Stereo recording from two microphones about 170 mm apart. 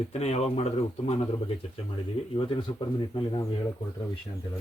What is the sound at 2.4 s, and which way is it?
Speech, 30° left (ahead or behind).